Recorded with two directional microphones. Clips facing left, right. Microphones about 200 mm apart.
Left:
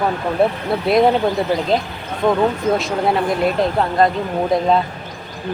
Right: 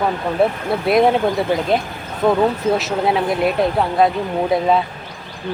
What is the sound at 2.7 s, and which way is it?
Speech, centre (ahead or behind).